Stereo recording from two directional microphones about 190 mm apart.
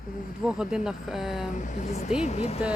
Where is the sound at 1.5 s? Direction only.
40° left (ahead or behind).